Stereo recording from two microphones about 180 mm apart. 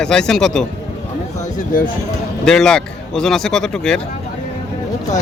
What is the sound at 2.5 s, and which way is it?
Speech, 5° left (ahead or behind).